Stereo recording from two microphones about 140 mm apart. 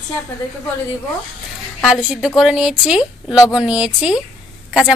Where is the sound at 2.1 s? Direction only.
5° right (ahead or behind).